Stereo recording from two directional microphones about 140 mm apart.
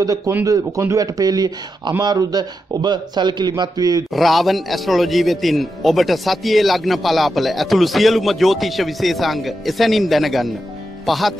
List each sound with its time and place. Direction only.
0.0 s speech: 25° right (ahead or behind)
4.1 s a man's voice: centre (ahead or behind)